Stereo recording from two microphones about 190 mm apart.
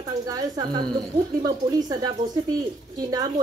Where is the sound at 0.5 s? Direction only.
25° right (ahead or behind).